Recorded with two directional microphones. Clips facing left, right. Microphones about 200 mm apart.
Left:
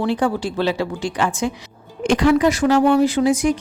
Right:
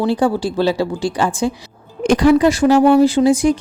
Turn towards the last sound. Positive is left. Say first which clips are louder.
# right 4 dB
turn(degrees=-30)  # may be behind; listen again after turning